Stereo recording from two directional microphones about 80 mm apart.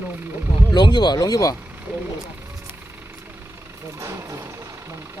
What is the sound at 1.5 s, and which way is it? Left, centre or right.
Speech, right.